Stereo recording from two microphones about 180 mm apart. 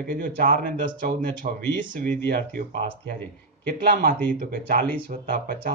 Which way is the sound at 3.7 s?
50° right (ahead or behind).